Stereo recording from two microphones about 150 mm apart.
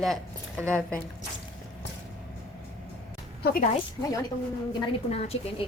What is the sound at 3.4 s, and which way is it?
Speech, 80° left.